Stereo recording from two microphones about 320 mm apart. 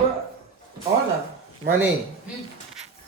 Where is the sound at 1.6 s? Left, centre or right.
Right.